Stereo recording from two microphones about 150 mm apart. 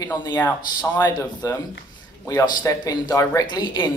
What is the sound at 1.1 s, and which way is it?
Speech, 25° left (ahead or behind).